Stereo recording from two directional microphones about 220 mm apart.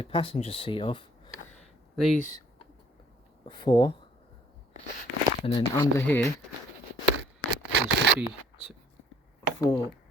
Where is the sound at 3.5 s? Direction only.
20° left (ahead or behind).